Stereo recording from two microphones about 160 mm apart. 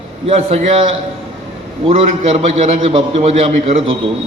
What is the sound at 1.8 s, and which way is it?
A man's voice, 40° right (ahead or behind).